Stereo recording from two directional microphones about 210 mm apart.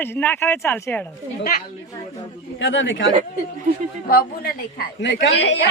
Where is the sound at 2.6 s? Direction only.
60° left (ahead or behind).